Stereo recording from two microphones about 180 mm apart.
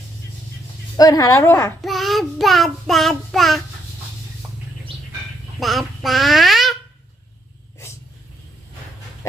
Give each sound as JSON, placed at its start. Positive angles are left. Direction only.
{"t": 0.9, "sound": "a woman's voice", "side_deg": 20}
{"t": 1.8, "sound": "child singing", "side_deg": 0}
{"t": 5.5, "sound": "speech", "side_deg": 0}